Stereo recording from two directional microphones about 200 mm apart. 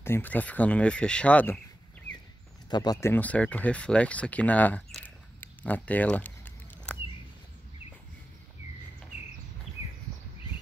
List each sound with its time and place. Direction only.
0.0 s speech: 10° left (ahead or behind)
2.7 s speech: 20° left (ahead or behind)